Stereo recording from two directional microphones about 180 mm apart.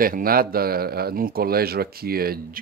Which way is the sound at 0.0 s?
55° right (ahead or behind).